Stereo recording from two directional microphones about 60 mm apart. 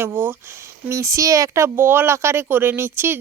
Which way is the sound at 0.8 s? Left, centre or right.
Right.